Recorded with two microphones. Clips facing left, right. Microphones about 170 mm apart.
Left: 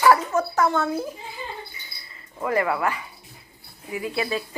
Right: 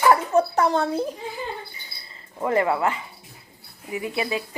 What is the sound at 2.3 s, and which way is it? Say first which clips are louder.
A woman's voice: right 2 dB; 25° right (ahead or behind).